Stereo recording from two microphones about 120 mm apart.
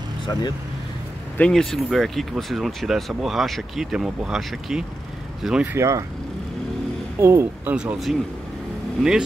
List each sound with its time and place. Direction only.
0.2 s vehicle: 35° left (ahead or behind)
1.4 s speech: 5° left (ahead or behind)
5.8 s speech: 25° right (ahead or behind)
7.2 s speech: 20° right (ahead or behind)
7.7 s speech: 5° right (ahead or behind)